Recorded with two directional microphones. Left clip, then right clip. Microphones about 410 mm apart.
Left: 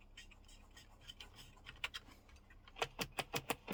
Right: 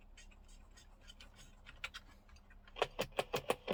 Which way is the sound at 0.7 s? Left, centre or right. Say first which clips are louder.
Left 4 dB; centre.